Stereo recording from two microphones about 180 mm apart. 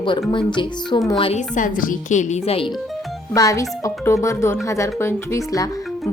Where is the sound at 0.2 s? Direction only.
25° left (ahead or behind).